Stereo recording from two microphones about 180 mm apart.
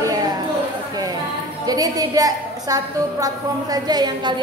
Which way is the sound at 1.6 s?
20° right (ahead or behind).